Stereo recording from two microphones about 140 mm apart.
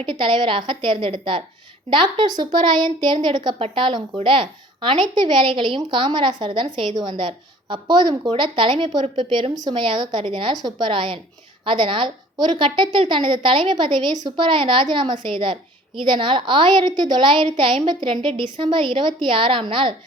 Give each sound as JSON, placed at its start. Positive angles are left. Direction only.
{"t": 0.0, "sound": "a woman's voice", "side_deg": -35}